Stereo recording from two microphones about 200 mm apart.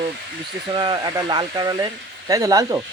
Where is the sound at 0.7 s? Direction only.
25° right (ahead or behind).